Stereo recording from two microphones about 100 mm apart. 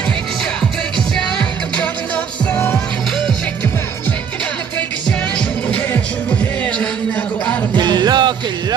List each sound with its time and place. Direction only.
5.7 s music: 15° left (ahead or behind)
7.8 s music: 45° right (ahead or behind)